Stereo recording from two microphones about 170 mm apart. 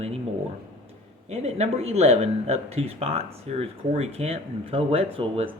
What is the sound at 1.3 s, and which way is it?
Speech, 40° right (ahead or behind).